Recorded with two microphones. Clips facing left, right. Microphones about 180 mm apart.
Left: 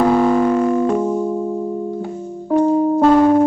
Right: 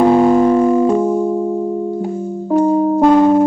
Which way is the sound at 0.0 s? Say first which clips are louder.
Right 4 dB; 20° right (ahead or behind).